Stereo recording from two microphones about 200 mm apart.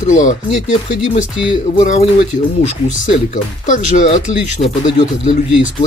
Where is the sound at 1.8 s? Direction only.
35° left (ahead or behind).